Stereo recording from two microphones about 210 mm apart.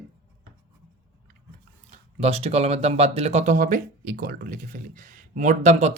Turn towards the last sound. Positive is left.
turn(degrees=-35)  # may be behind; listen again after turning